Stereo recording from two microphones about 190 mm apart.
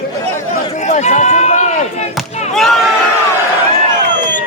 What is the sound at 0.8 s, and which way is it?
Chop, 40° left (ahead or behind).